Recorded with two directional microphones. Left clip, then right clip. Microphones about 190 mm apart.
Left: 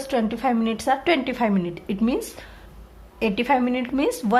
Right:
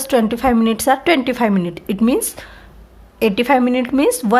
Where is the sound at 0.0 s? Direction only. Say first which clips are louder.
Right 7 dB; 30° right (ahead or behind).